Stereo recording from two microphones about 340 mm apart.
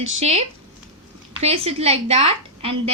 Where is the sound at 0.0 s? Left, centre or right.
Centre.